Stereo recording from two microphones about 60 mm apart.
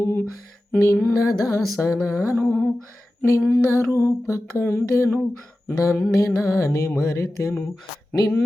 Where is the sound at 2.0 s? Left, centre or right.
Left.